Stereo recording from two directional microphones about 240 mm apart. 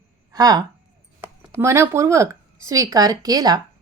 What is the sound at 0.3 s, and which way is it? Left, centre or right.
A woman's voice, centre.